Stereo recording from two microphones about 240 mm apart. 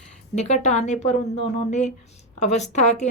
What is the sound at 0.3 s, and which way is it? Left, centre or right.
Speech, left.